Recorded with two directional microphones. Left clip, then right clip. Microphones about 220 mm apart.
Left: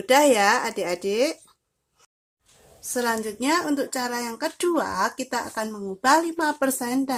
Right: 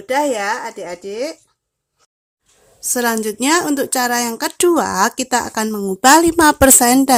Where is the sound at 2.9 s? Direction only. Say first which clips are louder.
Right 7 dB; 40° right (ahead or behind).